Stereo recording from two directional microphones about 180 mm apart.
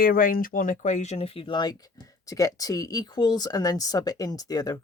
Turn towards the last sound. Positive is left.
turn(degrees=20)  # may be behind; listen again after turning